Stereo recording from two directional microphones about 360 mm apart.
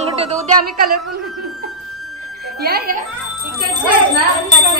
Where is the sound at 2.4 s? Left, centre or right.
Right.